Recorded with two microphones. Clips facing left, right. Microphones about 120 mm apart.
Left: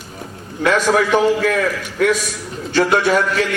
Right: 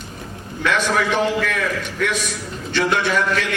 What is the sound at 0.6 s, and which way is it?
Speech, 40° left (ahead or behind).